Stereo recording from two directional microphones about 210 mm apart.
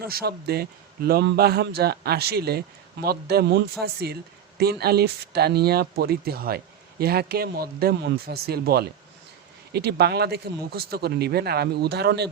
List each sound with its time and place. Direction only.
0.0 s a man's voice: 45° right (ahead or behind)